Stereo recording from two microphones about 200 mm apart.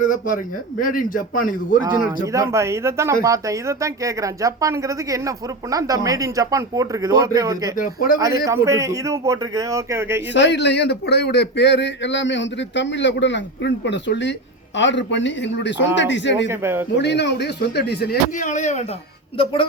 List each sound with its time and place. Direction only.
0.8 s a man's voice: 45° left (ahead or behind)
1.8 s speech: 15° right (ahead or behind)
7.8 s a man's voice: 45° left (ahead or behind)
8.4 s speech: 15° right (ahead or behind)
10.3 s speech: 60° left (ahead or behind)
16.5 s speech: 10° right (ahead or behind)
17.0 s a man's voice: 60° left (ahead or behind); by 18.9 s 35° left (ahead or behind)